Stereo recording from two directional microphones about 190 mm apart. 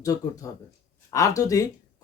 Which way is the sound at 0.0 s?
20° left (ahead or behind).